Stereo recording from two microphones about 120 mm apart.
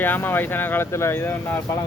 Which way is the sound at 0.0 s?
15° left (ahead or behind).